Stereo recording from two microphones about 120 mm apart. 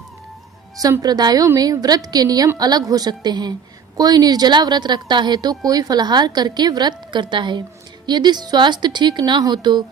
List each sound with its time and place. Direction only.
0.8 s a woman's voice: 30° right (ahead or behind)